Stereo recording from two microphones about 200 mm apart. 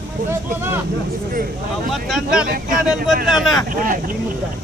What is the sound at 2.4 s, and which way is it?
Speech, 45° right (ahead or behind).